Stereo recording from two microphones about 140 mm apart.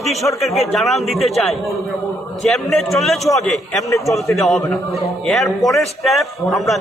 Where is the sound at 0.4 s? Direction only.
Centre (ahead or behind).